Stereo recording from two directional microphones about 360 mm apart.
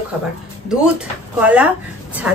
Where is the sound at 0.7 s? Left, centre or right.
Centre.